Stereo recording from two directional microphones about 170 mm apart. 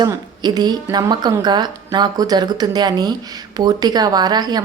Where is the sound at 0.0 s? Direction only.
25° right (ahead or behind).